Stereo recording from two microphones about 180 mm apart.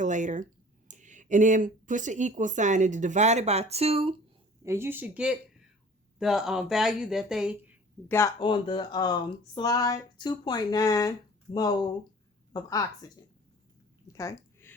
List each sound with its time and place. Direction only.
0.0 s a woman's voice: 45° right (ahead or behind)
4.6 s speech: 15° right (ahead or behind)
8.0 s speech: 15° left (ahead or behind)
8.4 s speech: 25° left (ahead or behind)
14.1 s a sound: 15° left (ahead or behind)